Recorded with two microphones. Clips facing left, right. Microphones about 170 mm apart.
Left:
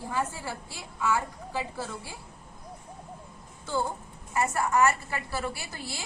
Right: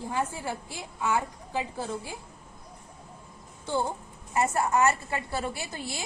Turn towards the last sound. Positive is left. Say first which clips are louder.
# right 3 dB
turn(degrees=-20)  # may be behind; listen again after turning